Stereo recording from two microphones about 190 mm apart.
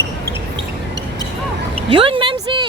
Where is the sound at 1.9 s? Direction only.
25° right (ahead or behind).